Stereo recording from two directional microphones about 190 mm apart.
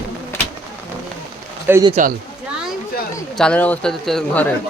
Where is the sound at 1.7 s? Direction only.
10° right (ahead or behind).